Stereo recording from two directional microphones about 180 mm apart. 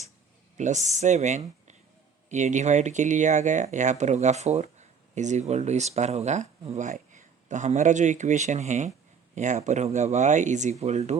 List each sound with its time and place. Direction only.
0.5 s speech: 40° right (ahead or behind)